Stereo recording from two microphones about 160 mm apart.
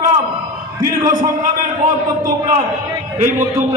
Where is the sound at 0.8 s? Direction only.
20° right (ahead or behind).